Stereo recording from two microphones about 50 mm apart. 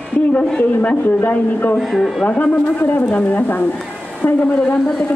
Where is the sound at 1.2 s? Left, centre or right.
Left.